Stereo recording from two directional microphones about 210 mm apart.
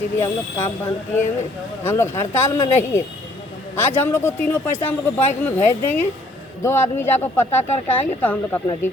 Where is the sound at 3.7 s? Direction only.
10° left (ahead or behind).